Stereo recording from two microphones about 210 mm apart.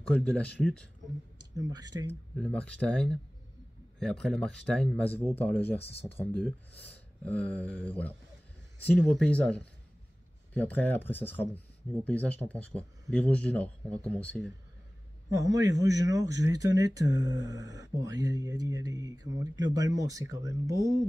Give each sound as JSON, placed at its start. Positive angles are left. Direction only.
{"t": 0.0, "sound": "speech", "side_deg": 5}
{"t": 1.6, "sound": "speech", "side_deg": -20}
{"t": 2.3, "sound": "speech", "side_deg": 5}
{"t": 15.2, "sound": "speech", "side_deg": -15}